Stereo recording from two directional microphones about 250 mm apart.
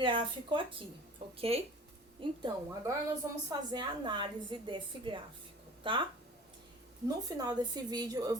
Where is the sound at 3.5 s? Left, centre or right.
Centre.